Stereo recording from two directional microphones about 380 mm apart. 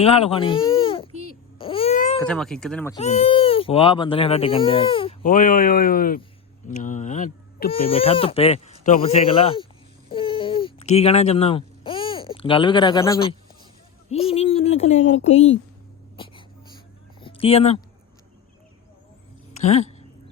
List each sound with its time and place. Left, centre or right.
0.0 s speech: centre
1.5 s babbling: centre
2.2 s speech: centre
3.0 s speech: centre
10.1 s a sound: centre
14.1 s speech: centre
16.1 s a sound: centre
19.6 s speech: centre